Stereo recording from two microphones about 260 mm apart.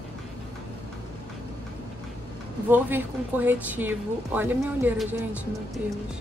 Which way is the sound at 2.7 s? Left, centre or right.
Centre.